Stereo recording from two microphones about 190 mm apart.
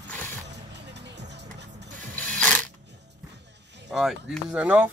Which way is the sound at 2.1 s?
5° left (ahead or behind).